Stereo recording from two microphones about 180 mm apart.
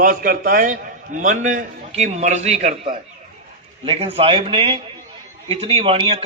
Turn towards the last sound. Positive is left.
turn(degrees=-30)  # may be behind; listen again after turning